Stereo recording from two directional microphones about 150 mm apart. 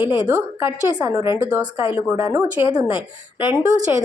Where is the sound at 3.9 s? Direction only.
15° right (ahead or behind).